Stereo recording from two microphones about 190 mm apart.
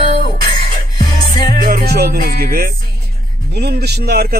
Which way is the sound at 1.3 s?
25° left (ahead or behind).